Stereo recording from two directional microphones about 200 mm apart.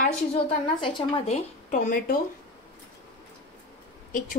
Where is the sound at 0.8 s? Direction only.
25° left (ahead or behind).